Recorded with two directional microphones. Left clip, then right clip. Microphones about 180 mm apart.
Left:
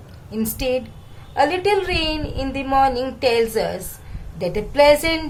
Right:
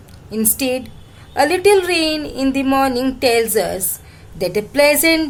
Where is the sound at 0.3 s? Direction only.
45° right (ahead or behind).